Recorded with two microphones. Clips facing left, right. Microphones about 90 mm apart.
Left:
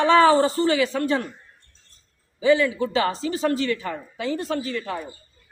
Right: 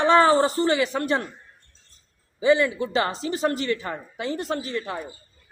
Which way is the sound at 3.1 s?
20° right (ahead or behind).